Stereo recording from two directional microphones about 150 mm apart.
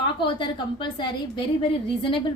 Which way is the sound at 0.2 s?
30° left (ahead or behind).